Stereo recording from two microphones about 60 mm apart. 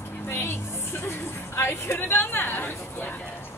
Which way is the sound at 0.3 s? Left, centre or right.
Left.